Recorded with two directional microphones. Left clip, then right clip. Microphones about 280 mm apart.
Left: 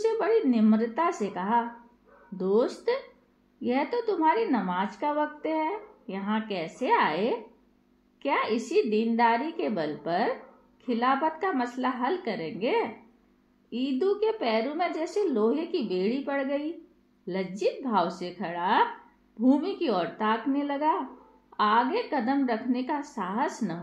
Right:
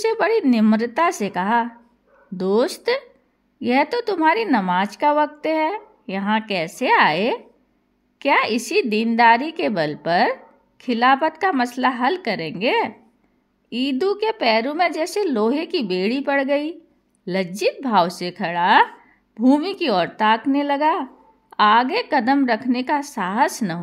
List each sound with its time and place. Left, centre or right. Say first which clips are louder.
0.0 s a woman's voice: right 6 dB; right